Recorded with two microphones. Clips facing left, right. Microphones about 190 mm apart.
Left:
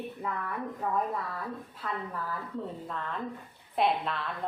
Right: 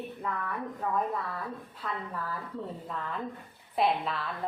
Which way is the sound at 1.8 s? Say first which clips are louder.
Left 1 dB; centre (ahead or behind).